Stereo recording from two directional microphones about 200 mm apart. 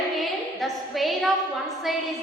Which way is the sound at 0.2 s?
Centre (ahead or behind).